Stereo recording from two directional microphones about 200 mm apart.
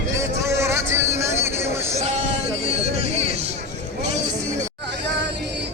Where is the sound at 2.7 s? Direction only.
30° right (ahead or behind).